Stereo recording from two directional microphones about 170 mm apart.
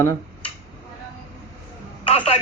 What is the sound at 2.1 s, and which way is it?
Speech, 30° left (ahead or behind).